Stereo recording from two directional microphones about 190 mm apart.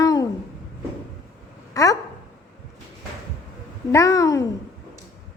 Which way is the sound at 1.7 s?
15° left (ahead or behind).